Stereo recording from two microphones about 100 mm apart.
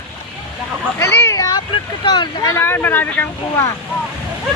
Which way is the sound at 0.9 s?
25° left (ahead or behind).